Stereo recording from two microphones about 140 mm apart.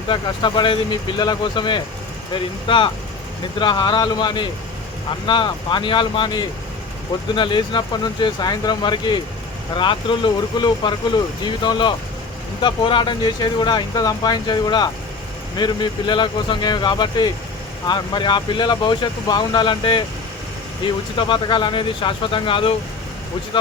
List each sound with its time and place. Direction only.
0.1 s speech: 35° left (ahead or behind)